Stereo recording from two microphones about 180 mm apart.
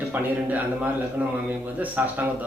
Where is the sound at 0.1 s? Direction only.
10° right (ahead or behind).